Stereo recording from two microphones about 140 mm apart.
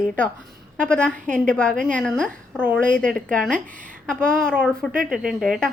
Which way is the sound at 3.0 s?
5° left (ahead or behind).